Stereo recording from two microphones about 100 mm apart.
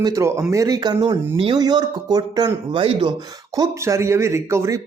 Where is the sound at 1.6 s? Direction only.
40° right (ahead or behind).